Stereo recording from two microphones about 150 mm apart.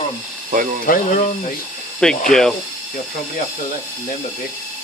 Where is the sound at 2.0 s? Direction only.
5° left (ahead or behind).